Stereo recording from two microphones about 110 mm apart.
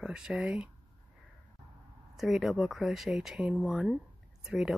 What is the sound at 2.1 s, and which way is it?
Speech, centre (ahead or behind).